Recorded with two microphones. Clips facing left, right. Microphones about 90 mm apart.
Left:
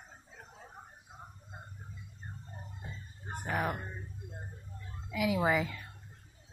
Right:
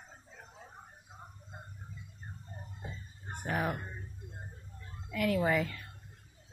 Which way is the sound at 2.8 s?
Centre (ahead or behind).